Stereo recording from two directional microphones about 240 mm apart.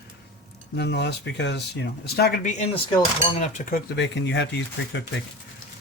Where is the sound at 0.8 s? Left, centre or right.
Left.